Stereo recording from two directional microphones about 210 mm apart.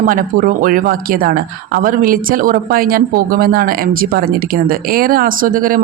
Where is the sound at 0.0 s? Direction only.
40° right (ahead or behind).